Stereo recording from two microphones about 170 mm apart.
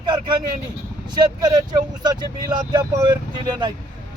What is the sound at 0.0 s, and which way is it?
Vehicle, 25° right (ahead or behind).